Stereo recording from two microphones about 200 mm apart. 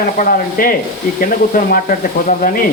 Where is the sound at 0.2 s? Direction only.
45° left (ahead or behind).